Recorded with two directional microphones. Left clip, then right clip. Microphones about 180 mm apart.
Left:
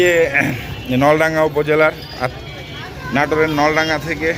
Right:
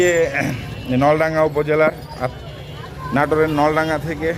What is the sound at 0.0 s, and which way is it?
A man's voice, 10° right (ahead or behind).